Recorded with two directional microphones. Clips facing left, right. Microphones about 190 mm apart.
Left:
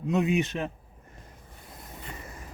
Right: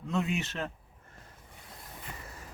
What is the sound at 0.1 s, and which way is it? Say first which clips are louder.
Speech: left 6 dB; 15° left (ahead or behind).